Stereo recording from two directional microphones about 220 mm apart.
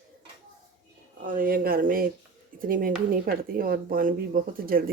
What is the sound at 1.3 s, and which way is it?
Speech, 40° right (ahead or behind).